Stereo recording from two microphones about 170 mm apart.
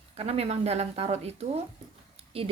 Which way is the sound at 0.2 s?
35° right (ahead or behind).